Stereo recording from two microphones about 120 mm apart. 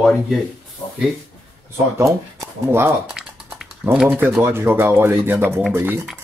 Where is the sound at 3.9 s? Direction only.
10° right (ahead or behind).